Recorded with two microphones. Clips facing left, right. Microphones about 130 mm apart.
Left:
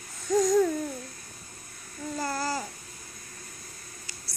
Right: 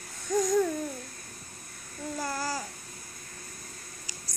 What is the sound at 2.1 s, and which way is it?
Babbling, 5° right (ahead or behind).